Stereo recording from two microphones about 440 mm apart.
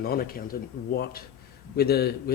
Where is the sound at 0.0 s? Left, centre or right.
Centre.